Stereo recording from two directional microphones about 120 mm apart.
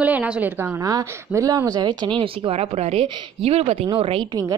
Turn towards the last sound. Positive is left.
turn(degrees=-50)  # may be behind; listen again after turning